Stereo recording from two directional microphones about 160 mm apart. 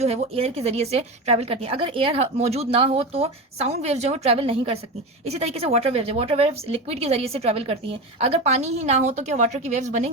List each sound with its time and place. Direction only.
0.0 s speech: 40° right (ahead or behind)